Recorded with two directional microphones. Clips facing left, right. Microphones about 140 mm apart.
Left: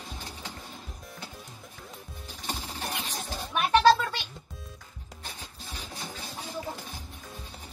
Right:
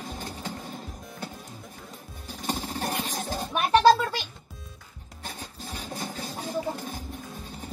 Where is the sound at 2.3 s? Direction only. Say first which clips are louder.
Right 6 dB; 45° right (ahead or behind).